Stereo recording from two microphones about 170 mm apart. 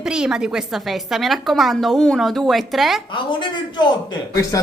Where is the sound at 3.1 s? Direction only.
30° left (ahead or behind).